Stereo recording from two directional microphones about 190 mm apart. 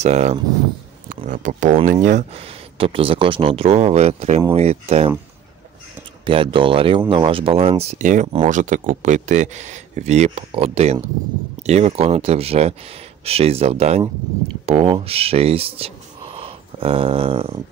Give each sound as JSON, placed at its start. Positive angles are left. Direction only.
{"t": 0.0, "sound": "speech", "side_deg": -35}
{"t": 6.2, "sound": "speech", "side_deg": -25}